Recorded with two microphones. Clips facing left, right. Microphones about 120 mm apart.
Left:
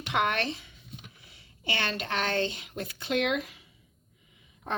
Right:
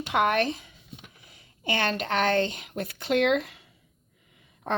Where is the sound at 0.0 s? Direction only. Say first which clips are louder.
Right 4 dB; 35° right (ahead or behind).